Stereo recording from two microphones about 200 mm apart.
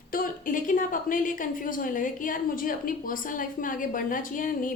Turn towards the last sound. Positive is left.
turn(degrees=40)  # may be behind; listen again after turning